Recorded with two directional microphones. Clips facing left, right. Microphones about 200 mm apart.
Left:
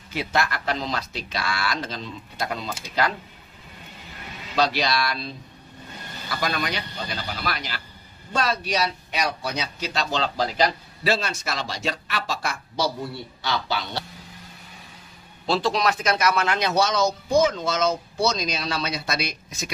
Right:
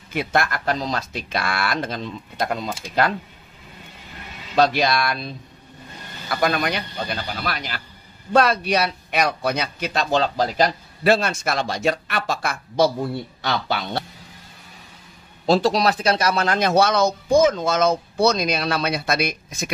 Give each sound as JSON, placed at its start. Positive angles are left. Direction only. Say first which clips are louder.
{"t": 0.1, "sound": "a man's voice", "louder": "right 3 dB", "side_deg": -50}
{"t": 4.6, "sound": "a man's voice", "louder": "right 4 dB", "side_deg": -50}
{"t": 6.3, "sound": "a man's voice", "louder": "right 6 dB", "side_deg": -55}
{"t": 15.4, "sound": "speech", "louder": "right 5 dB", "side_deg": -40}
{"t": 16.5, "sound": "speech", "louder": "right 4 dB", "side_deg": -55}